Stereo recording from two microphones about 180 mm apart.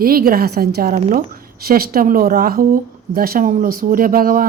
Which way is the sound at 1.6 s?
55° right (ahead or behind).